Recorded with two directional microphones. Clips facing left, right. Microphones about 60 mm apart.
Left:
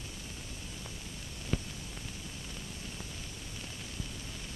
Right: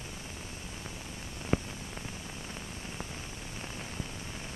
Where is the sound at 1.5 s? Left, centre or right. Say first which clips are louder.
Right 6 dB; right.